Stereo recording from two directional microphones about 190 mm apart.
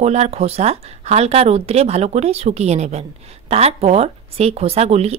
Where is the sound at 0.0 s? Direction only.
35° right (ahead or behind).